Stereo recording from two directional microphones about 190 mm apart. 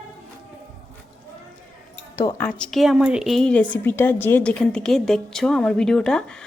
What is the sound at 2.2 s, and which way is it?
Speech, 15° left (ahead or behind).